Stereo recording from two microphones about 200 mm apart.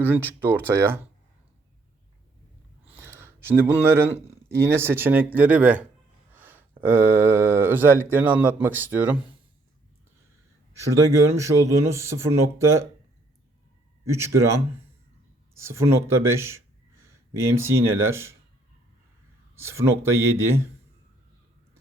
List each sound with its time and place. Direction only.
0.3 s speech: 10° right (ahead or behind)
2.8 s speech: 10° right (ahead or behind)
11.3 s speech: 15° right (ahead or behind)
14.0 s speech: 15° right (ahead or behind)
19.5 s speech: 10° right (ahead or behind)